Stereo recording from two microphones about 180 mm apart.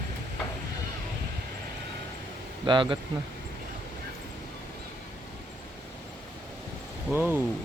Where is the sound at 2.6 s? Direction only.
25° right (ahead or behind).